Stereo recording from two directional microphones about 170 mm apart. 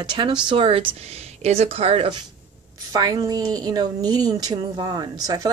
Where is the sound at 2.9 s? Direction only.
20° right (ahead or behind).